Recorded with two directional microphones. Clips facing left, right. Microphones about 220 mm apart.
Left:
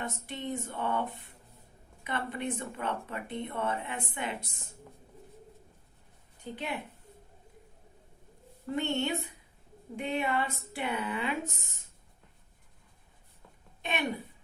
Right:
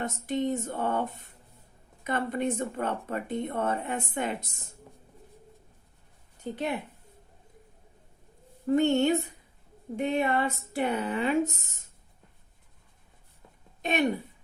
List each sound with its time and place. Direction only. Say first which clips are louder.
0.0 s speech: right 8 dB; 40° right (ahead or behind)
6.4 s a woman's voice: right 6 dB; 45° right (ahead or behind)
8.7 s speech: right 8 dB; 45° right (ahead or behind)